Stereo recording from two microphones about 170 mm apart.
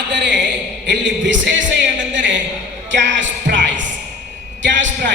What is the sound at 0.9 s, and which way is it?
Speech, 90° right.